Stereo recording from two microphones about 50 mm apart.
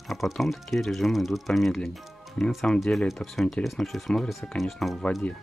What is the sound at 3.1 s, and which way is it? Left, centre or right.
Speech, centre.